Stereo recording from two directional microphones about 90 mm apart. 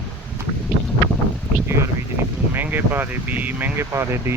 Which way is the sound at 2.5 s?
20° right (ahead or behind).